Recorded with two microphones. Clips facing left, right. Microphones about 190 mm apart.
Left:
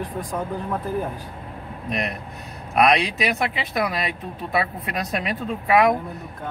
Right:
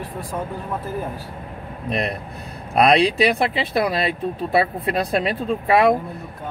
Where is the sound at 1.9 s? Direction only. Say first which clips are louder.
Right 3 dB; 30° right (ahead or behind).